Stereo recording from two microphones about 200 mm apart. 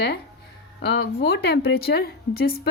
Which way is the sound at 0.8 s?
60° left (ahead or behind).